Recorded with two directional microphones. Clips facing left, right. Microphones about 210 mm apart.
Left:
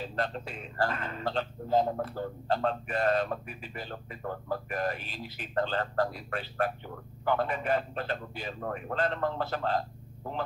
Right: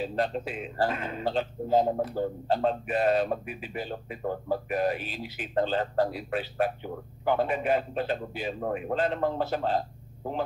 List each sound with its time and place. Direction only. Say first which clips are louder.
0.0 s a man's voice: right 5 dB; 10° right (ahead or behind)
4.2 s speech: right 5 dB; 25° right (ahead or behind)
4.7 s a man's voice: right 7 dB; 5° right (ahead or behind)